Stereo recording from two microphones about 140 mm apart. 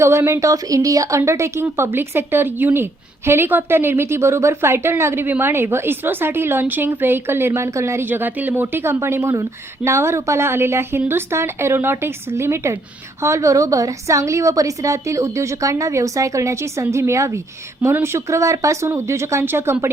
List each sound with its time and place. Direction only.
0.0 s a woman's voice: 20° right (ahead or behind)